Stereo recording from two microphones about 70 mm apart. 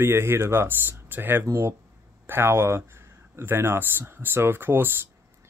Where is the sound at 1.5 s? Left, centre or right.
Right.